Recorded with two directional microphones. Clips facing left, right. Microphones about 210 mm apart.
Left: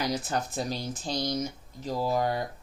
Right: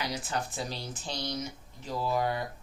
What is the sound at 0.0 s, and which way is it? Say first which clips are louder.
Speech: left 4 dB; 40° left (ahead or behind).